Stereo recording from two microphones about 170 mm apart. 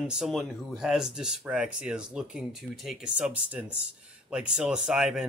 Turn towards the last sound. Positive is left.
turn(degrees=-5)  # may be behind; listen again after turning